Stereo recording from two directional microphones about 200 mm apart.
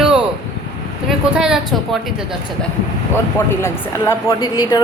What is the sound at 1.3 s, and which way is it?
Speech, 5° right (ahead or behind).